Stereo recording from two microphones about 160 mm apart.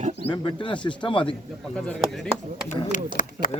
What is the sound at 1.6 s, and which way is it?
Speech, 5° left (ahead or behind).